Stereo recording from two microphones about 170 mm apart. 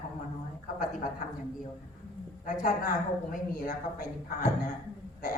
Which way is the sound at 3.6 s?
55° left (ahead or behind).